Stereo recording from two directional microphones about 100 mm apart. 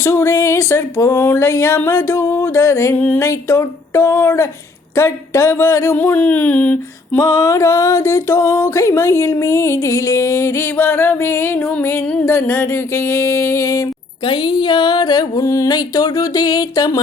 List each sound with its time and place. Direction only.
0.0 s music: 25° left (ahead or behind)
7.2 s music: 35° left (ahead or behind)
14.3 s a sound: 50° left (ahead or behind)